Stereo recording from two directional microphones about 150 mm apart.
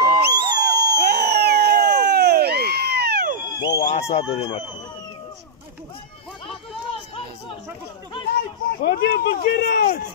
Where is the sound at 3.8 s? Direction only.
45° left (ahead or behind).